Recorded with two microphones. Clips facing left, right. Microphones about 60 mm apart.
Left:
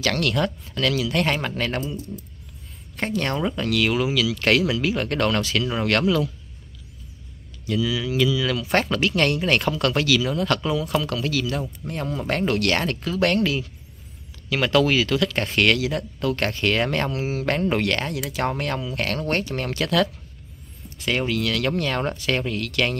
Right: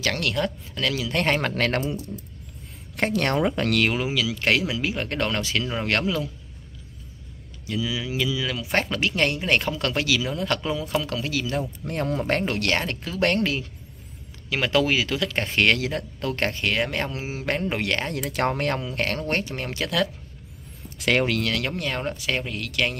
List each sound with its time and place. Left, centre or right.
0.0 s speech: right
1.1 s speech: right
1.6 s speech: right
3.0 s speech: right
3.8 s speech: right
7.6 s speech: right
11.9 s speech: right
12.4 s speech: right
18.1 s speech: right
21.4 s speech: right
21.6 s speech: centre